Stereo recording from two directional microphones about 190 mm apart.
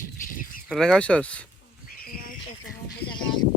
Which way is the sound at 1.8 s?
50° left (ahead or behind).